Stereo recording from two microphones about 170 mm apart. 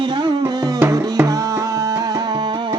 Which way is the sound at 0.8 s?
15° right (ahead or behind).